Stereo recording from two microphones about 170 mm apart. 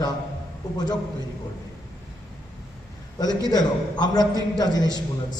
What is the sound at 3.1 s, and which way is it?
A man's voice, 25° left (ahead or behind).